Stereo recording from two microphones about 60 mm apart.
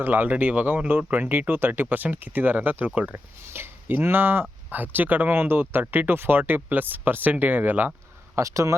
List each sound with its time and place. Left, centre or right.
0.0 s speech: right
3.5 s speech: right
8.4 s speech: right